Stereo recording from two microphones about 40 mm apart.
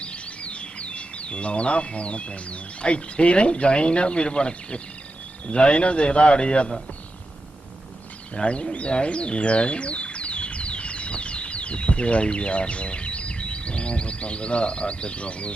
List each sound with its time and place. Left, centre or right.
0.0 s a man's voice: left
8.4 s a man's voice: left